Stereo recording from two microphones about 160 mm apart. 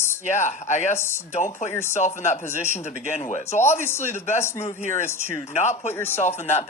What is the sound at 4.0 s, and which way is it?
A woman's voice, 45° left (ahead or behind).